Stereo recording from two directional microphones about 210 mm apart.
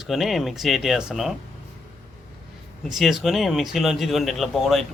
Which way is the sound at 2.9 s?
Centre (ahead or behind).